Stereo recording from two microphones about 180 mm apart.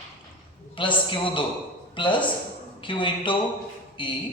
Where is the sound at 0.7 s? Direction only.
30° left (ahead or behind).